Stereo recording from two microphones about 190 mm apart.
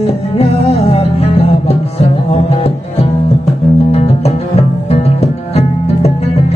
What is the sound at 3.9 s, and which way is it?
Music, 35° left (ahead or behind).